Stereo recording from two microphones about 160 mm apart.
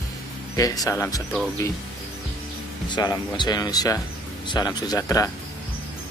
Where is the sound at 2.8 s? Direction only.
30° left (ahead or behind).